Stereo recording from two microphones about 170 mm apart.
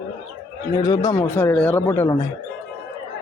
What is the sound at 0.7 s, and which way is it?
Speech, 20° left (ahead or behind).